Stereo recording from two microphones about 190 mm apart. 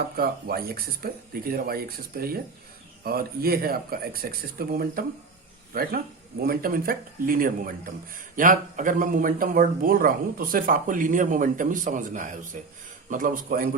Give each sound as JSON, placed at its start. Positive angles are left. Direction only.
{"t": 0.2, "sound": "speech", "side_deg": -55}